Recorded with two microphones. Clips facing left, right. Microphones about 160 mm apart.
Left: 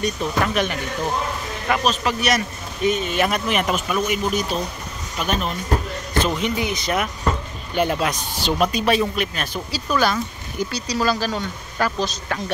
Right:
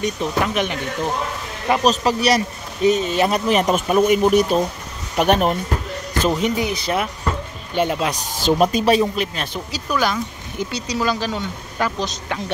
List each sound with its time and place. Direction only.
0.0 s speech: 20° right (ahead or behind)
1.9 s speech: 35° right (ahead or behind); by 5.6 s 60° right (ahead or behind)
6.2 s speech: 40° right (ahead or behind); by 8.1 s 20° right (ahead or behind)
8.1 s speech: 40° right (ahead or behind)
9.8 s speech: 15° right (ahead or behind)